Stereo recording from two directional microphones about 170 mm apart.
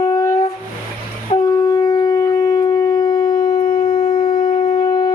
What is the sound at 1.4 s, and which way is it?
Shofar, 20° left (ahead or behind).